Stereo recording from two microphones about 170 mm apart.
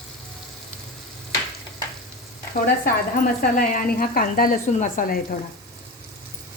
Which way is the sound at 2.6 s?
60° left (ahead or behind).